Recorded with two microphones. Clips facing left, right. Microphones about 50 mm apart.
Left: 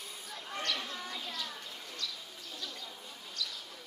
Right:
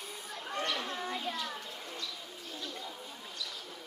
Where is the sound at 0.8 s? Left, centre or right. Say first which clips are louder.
Right 5 dB; right.